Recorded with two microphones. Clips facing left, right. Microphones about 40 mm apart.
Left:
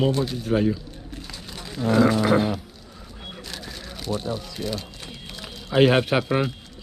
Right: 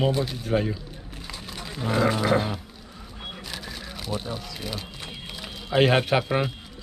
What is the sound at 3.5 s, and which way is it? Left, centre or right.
Crumpling, centre.